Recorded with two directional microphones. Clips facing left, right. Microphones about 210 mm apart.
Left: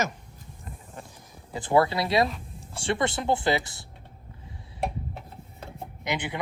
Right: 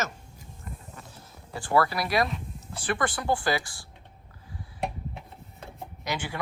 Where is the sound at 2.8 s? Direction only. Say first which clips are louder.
Left 2 dB; 25° left (ahead or behind).